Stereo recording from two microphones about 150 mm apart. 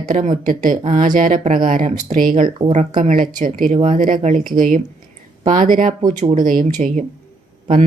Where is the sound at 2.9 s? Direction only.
60° right (ahead or behind).